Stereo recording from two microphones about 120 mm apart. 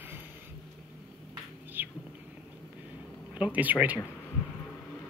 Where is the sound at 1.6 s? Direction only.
15° right (ahead or behind).